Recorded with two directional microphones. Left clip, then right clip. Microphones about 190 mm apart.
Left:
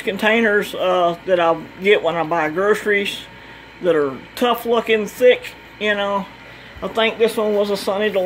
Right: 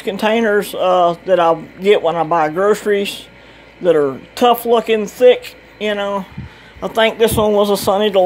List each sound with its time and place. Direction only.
0.0 s a man's voice: 20° right (ahead or behind)